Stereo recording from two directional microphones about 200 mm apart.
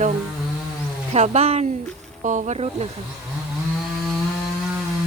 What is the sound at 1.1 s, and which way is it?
Speech, 30° right (ahead or behind).